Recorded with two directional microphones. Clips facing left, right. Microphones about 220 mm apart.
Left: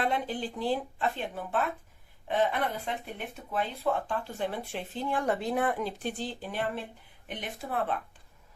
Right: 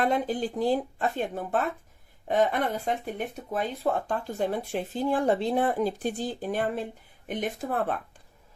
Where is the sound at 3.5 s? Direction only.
45° right (ahead or behind).